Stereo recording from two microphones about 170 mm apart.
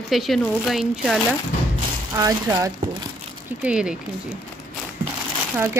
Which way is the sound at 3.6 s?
5° right (ahead or behind).